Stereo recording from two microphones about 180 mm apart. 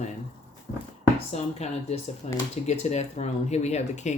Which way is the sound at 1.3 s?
35° left (ahead or behind).